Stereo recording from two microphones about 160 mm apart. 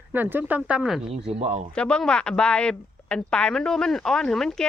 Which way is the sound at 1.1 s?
40° right (ahead or behind).